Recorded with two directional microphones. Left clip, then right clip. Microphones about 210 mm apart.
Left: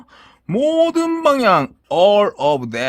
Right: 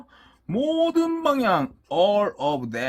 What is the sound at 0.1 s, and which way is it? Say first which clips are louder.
Speech: left 7 dB; 40° left (ahead or behind).